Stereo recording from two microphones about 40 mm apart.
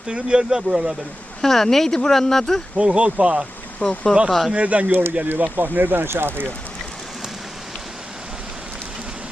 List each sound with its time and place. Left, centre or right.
0.1 s speech: right
1.4 s speech: centre
2.7 s speech: right
3.8 s speech: centre
4.3 s speech: centre
4.5 s speech: right
5.4 s speech: right